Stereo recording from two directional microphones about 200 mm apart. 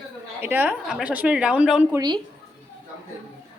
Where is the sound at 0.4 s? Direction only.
10° right (ahead or behind).